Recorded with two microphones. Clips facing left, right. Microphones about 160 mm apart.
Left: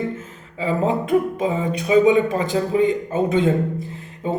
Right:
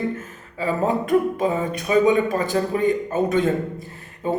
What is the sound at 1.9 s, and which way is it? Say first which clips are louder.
A man's voice: left 2 dB; 20° left (ahead or behind).